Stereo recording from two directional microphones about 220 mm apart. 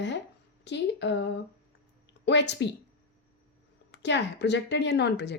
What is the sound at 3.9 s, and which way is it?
Speech, 55° left (ahead or behind).